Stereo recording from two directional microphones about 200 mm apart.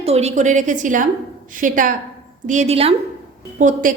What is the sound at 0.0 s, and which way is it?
A woman's voice, 30° right (ahead or behind).